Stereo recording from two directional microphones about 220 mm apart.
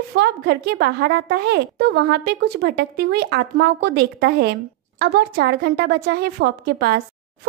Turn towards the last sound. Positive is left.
turn(degrees=-45)  # may be behind; listen again after turning